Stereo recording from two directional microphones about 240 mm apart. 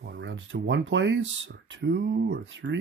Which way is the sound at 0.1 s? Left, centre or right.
Right.